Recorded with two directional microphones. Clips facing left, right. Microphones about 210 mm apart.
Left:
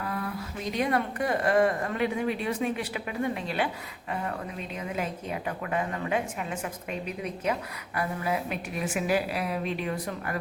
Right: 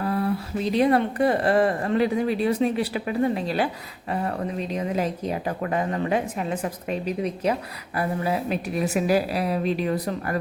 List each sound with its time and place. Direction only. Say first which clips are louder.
0.0 s speech: right 8 dB; 35° right (ahead or behind)